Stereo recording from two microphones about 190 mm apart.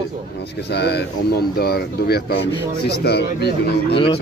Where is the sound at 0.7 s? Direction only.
60° left (ahead or behind).